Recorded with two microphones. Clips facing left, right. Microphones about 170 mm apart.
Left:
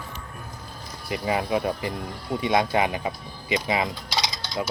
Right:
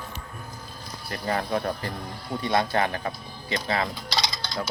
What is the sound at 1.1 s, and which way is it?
Speech, 10° left (ahead or behind).